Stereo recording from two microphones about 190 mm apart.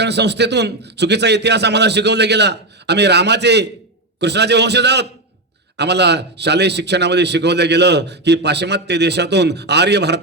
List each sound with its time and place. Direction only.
0.0 s a man's voice: 65° right (ahead or behind)